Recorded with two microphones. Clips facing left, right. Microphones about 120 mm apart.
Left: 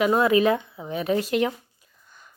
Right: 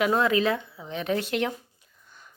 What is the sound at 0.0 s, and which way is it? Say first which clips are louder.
Speech: left 4 dB; 10° left (ahead or behind).